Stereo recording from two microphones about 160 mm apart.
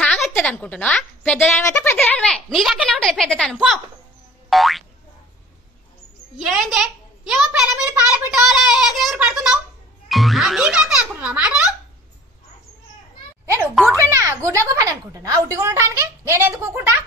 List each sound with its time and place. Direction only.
0.0 s a woman's voice: 5° left (ahead or behind)
4.5 s boing: centre (ahead or behind)
6.3 s a child's voice: 5° right (ahead or behind)
14.0 s a woman's voice: 20° right (ahead or behind)